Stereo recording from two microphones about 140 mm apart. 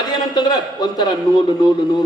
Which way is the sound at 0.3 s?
30° left (ahead or behind).